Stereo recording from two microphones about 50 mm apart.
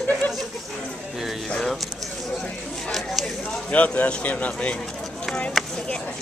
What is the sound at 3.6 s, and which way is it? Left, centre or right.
Speech, left.